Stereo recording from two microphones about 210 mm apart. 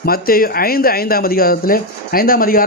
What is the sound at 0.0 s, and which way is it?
Speech, 45° left (ahead or behind).